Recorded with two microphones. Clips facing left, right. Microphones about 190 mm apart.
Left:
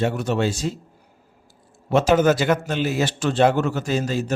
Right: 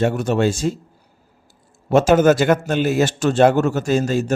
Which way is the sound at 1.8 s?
45° right (ahead or behind).